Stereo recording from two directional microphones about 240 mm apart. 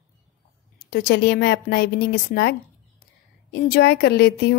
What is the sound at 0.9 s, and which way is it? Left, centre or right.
A woman's voice, left.